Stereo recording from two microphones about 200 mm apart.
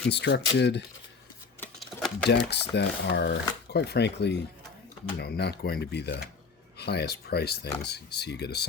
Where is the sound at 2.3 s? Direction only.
55° left (ahead or behind).